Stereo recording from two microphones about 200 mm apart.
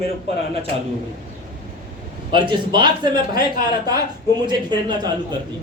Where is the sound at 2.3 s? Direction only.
25° right (ahead or behind).